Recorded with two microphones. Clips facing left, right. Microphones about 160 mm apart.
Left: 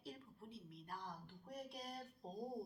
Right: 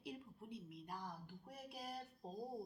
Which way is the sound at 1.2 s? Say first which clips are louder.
Left 3 dB; 5° right (ahead or behind).